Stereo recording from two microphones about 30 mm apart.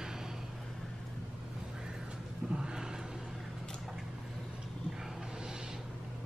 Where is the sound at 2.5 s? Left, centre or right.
Right.